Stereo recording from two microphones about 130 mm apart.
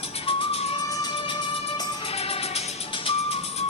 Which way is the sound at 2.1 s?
50° left (ahead or behind).